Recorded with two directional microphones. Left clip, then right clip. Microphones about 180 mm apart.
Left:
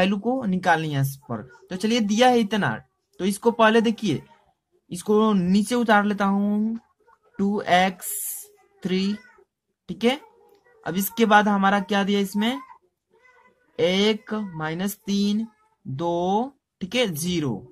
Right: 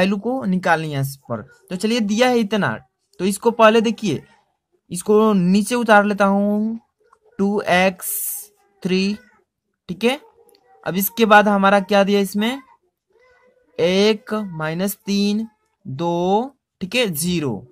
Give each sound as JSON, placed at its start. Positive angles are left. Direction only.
{"t": 0.0, "sound": "speech", "side_deg": -40}
{"t": 13.7, "sound": "speech", "side_deg": -40}